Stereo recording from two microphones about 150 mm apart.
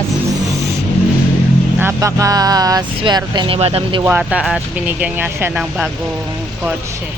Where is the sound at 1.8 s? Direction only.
20° right (ahead or behind).